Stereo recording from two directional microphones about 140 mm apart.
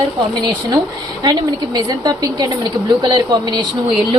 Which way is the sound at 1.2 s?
30° right (ahead or behind).